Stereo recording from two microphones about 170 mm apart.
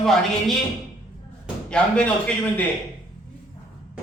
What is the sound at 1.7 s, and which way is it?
Speech, 5° left (ahead or behind).